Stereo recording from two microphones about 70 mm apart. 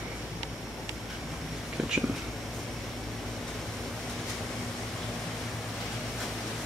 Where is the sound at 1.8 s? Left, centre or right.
Centre.